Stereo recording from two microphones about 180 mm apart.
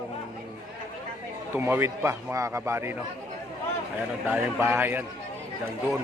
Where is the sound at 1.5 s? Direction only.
10° right (ahead or behind).